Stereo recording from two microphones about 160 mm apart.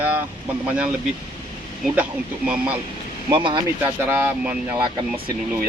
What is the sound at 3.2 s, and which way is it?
Speech, 30° right (ahead or behind).